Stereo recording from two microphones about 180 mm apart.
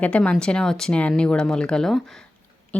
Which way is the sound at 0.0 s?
5° left (ahead or behind).